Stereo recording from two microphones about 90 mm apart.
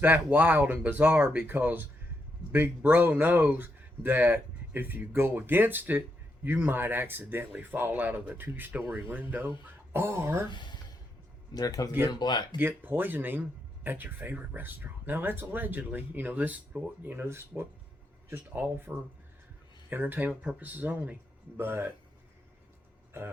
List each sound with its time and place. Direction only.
0.0 s speech: 20° right (ahead or behind)
10.5 s speech: 55° left (ahead or behind)
11.5 s speech: 45° left (ahead or behind)
12.5 s speech: 25° right (ahead or behind)